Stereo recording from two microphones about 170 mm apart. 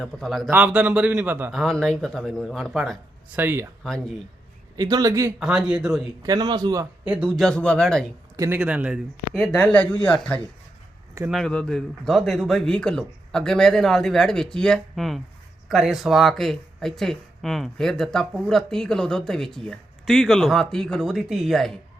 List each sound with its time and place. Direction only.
0.0 s a man's voice: centre (ahead or behind)
1.5 s speech: 5° left (ahead or behind)
3.3 s a man's voice: 15° right (ahead or behind)
4.8 s speech: 20° right (ahead or behind)
5.4 s speech: 5° right (ahead or behind)
6.2 s speech: 25° right (ahead or behind)
7.0 s speech: 5° right (ahead or behind)
8.4 s speech: 10° right (ahead or behind)